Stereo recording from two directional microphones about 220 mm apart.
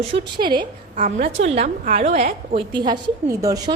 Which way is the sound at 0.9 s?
35° right (ahead or behind).